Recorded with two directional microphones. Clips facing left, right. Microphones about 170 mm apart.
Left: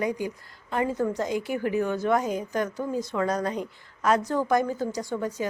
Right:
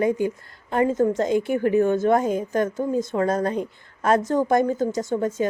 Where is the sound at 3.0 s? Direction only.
50° right (ahead or behind).